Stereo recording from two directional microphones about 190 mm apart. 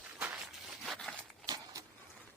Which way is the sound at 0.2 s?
5° right (ahead or behind).